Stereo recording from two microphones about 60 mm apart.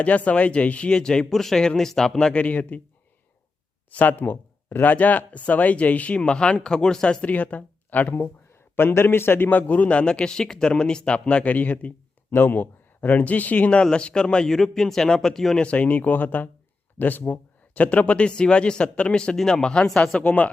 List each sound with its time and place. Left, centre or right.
0.0 s speech: left
3.9 s speech: left
7.3 s speech: left; by 15.6 s centre
15.6 s speech: left